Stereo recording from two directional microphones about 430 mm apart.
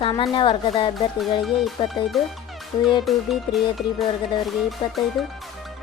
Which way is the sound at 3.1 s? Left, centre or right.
Centre.